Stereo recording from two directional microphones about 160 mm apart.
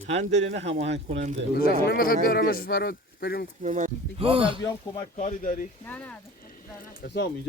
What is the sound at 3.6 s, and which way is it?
Speech, 50° right (ahead or behind).